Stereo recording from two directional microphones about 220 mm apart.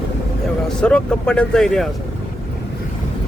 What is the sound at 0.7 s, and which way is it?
Speech, 5° left (ahead or behind).